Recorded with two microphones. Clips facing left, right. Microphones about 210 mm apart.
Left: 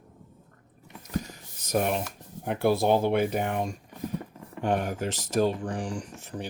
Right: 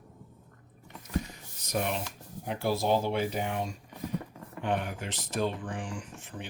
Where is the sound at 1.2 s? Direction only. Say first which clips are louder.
Left 1 dB; 45° left (ahead or behind).